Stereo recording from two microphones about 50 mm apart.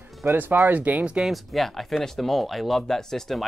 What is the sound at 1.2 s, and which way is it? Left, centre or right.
Speech, centre.